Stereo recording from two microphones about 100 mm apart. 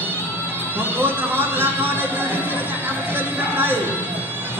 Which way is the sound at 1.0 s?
20° right (ahead or behind).